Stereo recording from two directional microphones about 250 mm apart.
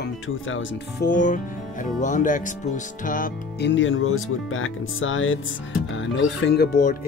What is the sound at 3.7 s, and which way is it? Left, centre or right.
Speech, left.